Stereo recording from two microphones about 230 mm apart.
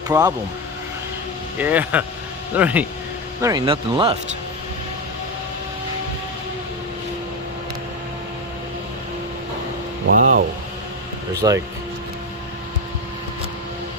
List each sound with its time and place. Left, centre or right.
0.1 s speech: centre
1.5 s speech: centre
3.4 s speech: centre
10.1 s speech: right
11.4 s speech: centre